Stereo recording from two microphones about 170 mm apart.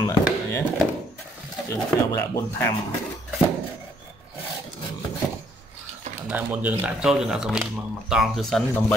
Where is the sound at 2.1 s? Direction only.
20° left (ahead or behind).